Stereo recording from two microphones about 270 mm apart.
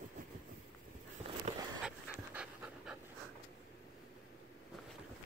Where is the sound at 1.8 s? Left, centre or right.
Centre.